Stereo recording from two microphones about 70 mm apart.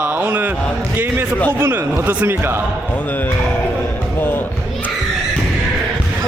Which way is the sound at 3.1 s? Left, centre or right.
Left.